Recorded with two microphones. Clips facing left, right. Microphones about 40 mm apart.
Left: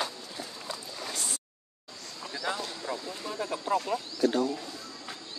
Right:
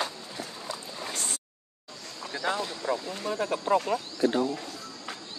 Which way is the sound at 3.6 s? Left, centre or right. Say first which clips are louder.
Right 4 dB; right.